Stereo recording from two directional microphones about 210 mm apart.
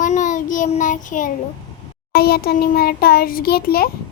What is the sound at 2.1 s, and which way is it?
A child's voice, 45° left (ahead or behind).